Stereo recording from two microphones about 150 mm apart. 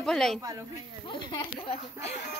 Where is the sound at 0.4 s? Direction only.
25° right (ahead or behind).